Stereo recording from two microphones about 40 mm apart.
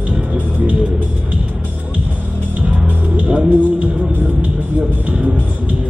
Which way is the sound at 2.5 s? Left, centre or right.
Right.